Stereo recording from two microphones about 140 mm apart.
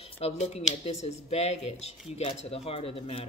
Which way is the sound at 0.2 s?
45° left (ahead or behind).